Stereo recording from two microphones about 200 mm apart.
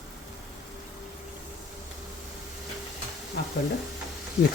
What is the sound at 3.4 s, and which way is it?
Stir, 55° left (ahead or behind).